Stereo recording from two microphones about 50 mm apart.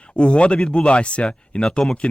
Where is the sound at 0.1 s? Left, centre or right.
Left.